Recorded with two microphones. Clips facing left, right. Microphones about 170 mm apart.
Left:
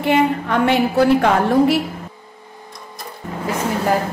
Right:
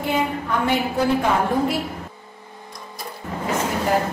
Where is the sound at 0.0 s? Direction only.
75° left (ahead or behind).